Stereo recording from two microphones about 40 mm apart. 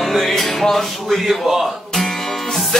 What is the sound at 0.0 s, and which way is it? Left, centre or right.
Music, centre.